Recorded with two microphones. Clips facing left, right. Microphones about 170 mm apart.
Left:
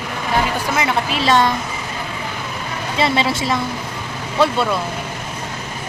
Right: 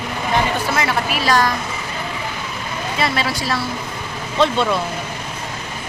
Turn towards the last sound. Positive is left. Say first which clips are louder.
# even
turn(degrees=10)  # may be behind; listen again after turning